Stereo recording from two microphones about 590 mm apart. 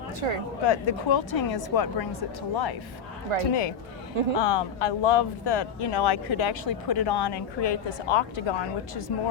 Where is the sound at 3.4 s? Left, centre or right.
Left.